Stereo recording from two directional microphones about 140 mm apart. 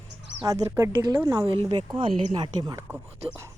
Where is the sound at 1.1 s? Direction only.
25° right (ahead or behind).